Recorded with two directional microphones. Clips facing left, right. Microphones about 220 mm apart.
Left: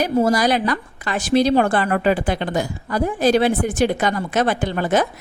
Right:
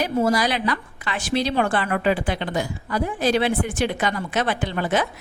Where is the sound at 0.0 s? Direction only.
45° left (ahead or behind).